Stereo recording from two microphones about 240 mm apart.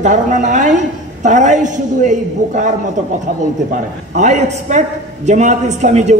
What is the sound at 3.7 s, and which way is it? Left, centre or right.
A man's voice, right.